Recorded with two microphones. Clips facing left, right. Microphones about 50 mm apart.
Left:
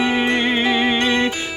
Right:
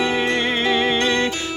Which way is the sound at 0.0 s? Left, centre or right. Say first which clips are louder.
Left 2 dB; centre.